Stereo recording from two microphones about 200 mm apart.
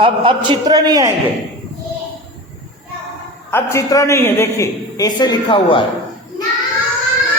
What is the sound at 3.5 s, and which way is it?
A man's voice, 10° left (ahead or behind).